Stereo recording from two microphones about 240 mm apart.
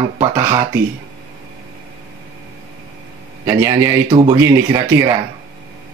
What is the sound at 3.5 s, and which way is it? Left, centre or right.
Speech, centre.